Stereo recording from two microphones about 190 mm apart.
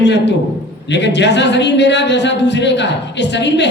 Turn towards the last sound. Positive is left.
turn(degrees=65)  # may be behind; listen again after turning